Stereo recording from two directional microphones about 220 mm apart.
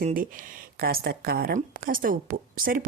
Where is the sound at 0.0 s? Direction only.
40° right (ahead or behind).